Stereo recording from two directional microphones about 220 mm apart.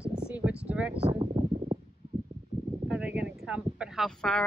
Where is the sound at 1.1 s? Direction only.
25° right (ahead or behind).